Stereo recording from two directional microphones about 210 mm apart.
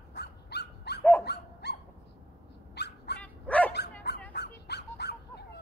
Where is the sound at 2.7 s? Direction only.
50° left (ahead or behind).